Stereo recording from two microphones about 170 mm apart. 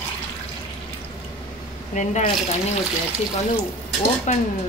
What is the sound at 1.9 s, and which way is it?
Speech, 45° left (ahead or behind).